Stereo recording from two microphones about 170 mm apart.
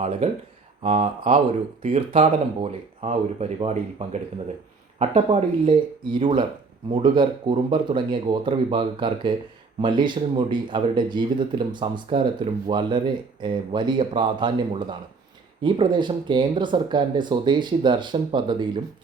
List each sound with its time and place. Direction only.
0.2 s speech: 35° right (ahead or behind)